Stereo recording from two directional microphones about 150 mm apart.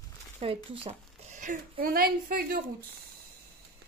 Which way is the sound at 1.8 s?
75° right (ahead or behind).